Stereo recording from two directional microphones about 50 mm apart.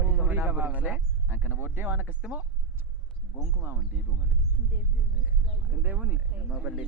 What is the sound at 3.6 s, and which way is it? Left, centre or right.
Speech, right.